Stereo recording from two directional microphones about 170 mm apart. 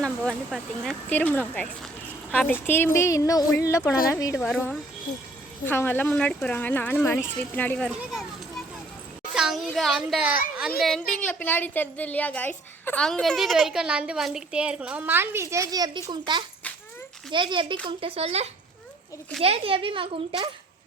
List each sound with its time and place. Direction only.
0.0 s speech: 5° left (ahead or behind)
4.4 s a woman's voice: centre (ahead or behind)
5.6 s speech: 10° left (ahead or behind)
7.9 s children playing: 5° right (ahead or behind)
9.3 s a woman's voice: centre (ahead or behind); by 20.5 s 30° right (ahead or behind)